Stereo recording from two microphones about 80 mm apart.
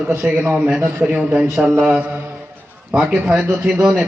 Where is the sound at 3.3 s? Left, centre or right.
Right.